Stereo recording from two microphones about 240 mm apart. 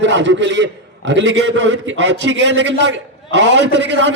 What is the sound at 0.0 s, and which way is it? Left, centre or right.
A man's voice, right.